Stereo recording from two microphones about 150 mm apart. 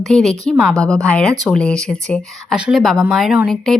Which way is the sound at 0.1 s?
Centre (ahead or behind).